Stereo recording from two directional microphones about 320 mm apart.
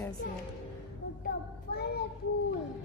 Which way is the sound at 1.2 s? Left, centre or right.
Left.